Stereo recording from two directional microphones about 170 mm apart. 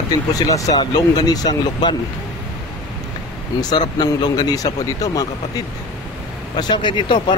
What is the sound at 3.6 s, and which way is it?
Speech, 25° left (ahead or behind).